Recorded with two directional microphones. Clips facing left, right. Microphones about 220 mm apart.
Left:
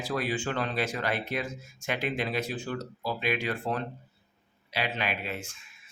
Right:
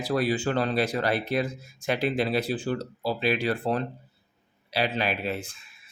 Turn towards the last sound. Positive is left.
turn(degrees=-35)  # may be behind; listen again after turning